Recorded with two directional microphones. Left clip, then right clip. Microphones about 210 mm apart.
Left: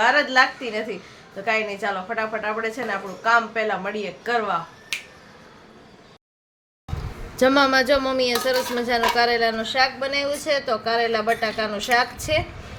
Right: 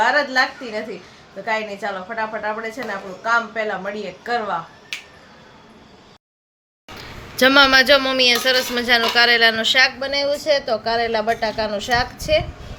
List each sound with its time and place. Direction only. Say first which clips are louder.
0.0 s speech: even; centre (ahead or behind)
4.9 s finger snapping: left 1 dB; 35° left (ahead or behind)
7.3 s speech: right 5 dB; 5° left (ahead or behind)